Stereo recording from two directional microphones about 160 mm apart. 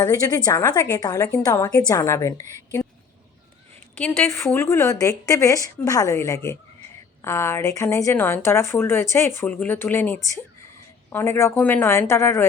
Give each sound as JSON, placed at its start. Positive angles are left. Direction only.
{"t": 0.0, "sound": "a woman's voice", "side_deg": 25}
{"t": 3.9, "sound": "a woman's voice", "side_deg": 10}